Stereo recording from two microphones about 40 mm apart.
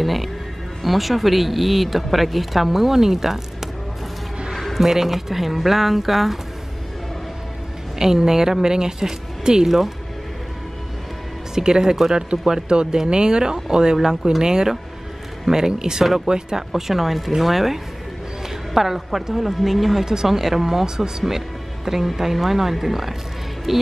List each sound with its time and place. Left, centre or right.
0.0 s speech: centre
8.0 s speech: centre
11.5 s speech: centre